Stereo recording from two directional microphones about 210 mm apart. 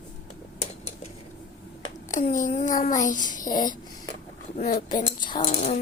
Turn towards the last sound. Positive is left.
turn(degrees=30)  # may be behind; listen again after turning